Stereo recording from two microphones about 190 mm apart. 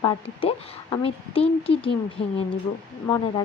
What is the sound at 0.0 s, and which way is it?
Speech, 20° left (ahead or behind).